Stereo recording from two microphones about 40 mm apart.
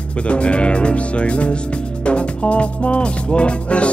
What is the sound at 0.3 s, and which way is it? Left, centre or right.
Music, left.